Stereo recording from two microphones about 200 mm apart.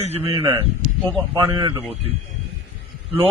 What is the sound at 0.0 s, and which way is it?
Speech, 30° right (ahead or behind).